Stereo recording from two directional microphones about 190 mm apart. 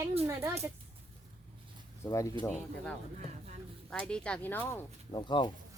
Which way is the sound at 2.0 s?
15° left (ahead or behind).